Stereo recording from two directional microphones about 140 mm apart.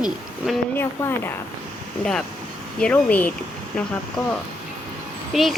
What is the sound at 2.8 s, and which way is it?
Speech, 10° left (ahead or behind).